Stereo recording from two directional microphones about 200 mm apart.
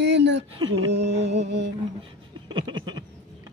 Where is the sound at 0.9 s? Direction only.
60° right (ahead or behind).